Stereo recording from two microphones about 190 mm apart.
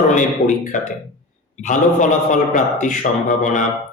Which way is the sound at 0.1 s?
40° left (ahead or behind).